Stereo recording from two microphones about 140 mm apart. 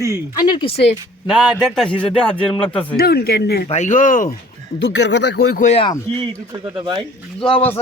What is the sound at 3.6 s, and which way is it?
Speech, 55° left (ahead or behind).